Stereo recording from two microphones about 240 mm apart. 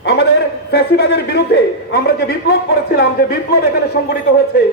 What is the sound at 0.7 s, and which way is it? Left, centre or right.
A man's voice, left.